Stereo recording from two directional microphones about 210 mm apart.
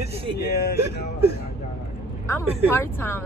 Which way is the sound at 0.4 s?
50° left (ahead or behind).